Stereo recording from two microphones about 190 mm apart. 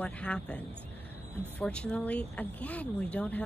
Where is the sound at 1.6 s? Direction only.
5° left (ahead or behind).